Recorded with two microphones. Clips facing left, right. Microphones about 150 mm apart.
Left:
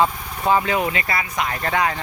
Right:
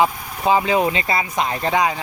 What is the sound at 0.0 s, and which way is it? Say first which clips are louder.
Speech: right 1 dB; 15° right (ahead or behind).